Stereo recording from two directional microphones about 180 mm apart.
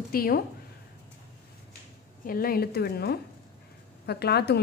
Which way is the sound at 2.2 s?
55° left (ahead or behind).